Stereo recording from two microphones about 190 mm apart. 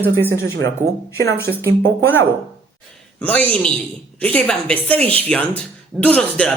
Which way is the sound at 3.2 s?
5° left (ahead or behind).